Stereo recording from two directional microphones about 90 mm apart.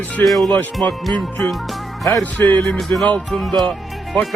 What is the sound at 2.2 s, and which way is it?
Speech, 20° left (ahead or behind).